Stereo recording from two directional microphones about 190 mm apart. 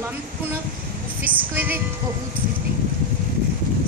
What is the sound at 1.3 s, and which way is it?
Speech, 10° right (ahead or behind).